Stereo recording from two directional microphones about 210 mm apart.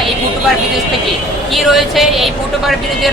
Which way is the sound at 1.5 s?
Centre (ahead or behind).